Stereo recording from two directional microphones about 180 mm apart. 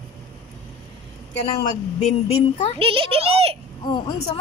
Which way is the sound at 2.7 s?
30° right (ahead or behind).